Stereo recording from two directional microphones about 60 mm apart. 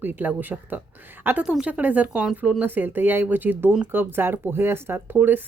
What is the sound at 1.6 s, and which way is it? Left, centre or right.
Speech, right.